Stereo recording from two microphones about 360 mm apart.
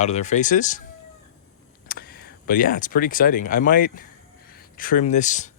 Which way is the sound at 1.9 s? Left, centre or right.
Left.